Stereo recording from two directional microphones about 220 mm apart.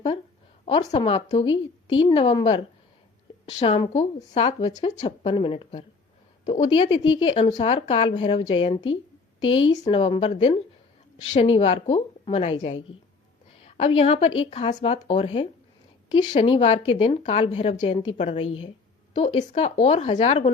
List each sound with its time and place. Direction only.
0.6 s speech: 25° left (ahead or behind)
3.6 s speech: 25° left (ahead or behind)
9.8 s speech: 25° left (ahead or behind)